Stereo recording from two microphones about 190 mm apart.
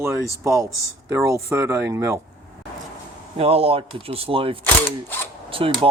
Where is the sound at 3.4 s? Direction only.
30° right (ahead or behind).